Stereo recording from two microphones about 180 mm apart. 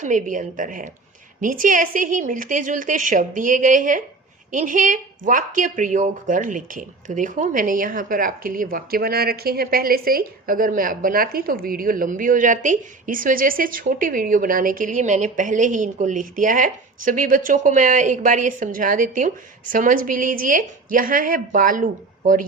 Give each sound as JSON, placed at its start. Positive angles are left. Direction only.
{"t": 0.0, "sound": "a woman's voice", "side_deg": -45}